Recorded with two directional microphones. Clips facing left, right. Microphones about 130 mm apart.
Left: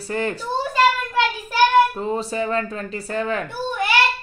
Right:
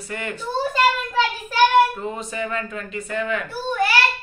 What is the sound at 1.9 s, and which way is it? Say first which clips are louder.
Speech: left 5 dB; 35° left (ahead or behind).